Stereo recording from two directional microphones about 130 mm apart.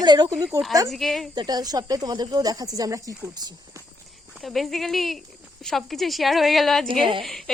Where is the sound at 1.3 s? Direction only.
30° right (ahead or behind).